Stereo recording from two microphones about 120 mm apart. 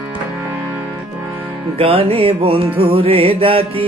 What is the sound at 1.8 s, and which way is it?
Music, 50° right (ahead or behind).